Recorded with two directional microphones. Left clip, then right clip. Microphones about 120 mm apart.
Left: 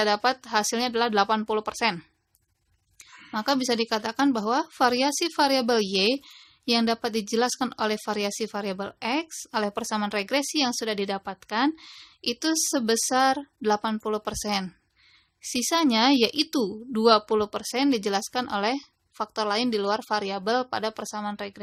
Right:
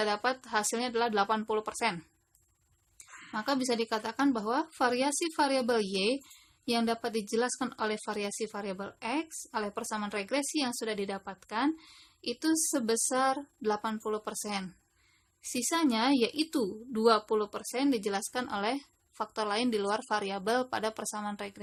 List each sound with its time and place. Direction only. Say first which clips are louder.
0.0 s speech: left 7 dB; 40° left (ahead or behind)
3.3 s speech: left 6 dB; 45° left (ahead or behind)